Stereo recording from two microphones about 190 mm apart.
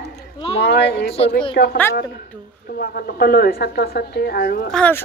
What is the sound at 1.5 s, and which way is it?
Speech, 55° left (ahead or behind).